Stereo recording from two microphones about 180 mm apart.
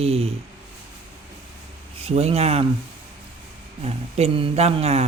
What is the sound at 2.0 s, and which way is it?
Speech, 35° right (ahead or behind).